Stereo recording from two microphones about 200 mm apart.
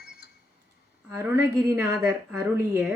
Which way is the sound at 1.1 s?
10° right (ahead or behind).